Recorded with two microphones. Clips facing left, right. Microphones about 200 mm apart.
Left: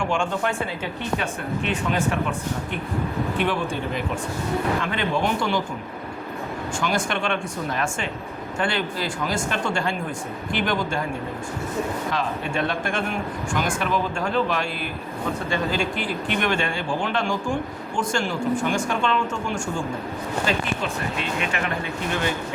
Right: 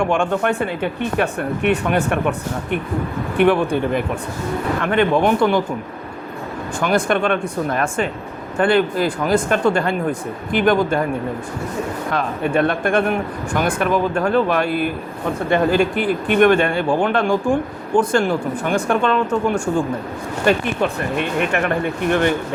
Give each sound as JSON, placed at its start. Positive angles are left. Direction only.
{"t": 0.0, "sound": "speech", "side_deg": -60}
{"t": 3.3, "sound": "speech", "side_deg": -55}
{"t": 6.7, "sound": "speech", "side_deg": -55}
{"t": 12.1, "sound": "speech", "side_deg": -55}